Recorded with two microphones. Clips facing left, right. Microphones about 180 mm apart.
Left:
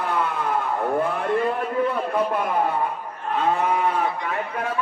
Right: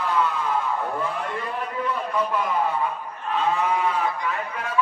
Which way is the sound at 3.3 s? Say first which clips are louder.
Left 1 dB; 50° left (ahead or behind).